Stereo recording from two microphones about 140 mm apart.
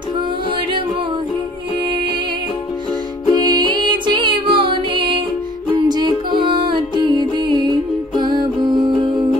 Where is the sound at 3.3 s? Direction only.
30° right (ahead or behind).